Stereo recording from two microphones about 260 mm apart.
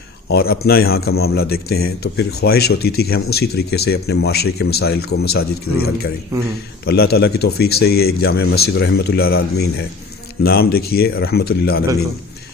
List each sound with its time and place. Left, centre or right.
0.3 s speech: left
5.7 s speech: left
6.8 s speech: left